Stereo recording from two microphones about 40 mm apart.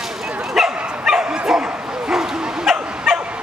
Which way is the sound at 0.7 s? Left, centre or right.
Right.